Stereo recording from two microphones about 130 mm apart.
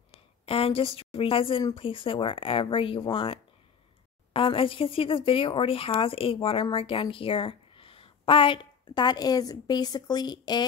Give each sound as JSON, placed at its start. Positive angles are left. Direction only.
{"t": 0.1, "sound": "a woman's voice", "side_deg": 45}